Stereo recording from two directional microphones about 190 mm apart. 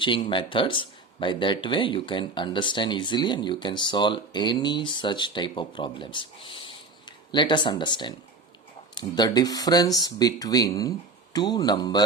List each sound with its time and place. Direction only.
0.0 s speech: 25° left (ahead or behind)